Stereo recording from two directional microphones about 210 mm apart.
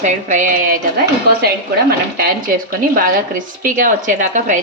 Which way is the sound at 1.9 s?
45° right (ahead or behind).